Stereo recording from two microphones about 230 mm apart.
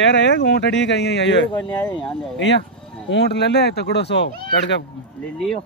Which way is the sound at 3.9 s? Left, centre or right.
Left.